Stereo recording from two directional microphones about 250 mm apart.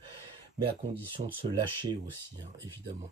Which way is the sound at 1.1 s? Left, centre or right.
Centre.